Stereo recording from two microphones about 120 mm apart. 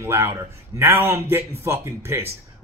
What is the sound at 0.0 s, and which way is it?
Speech, 20° right (ahead or behind).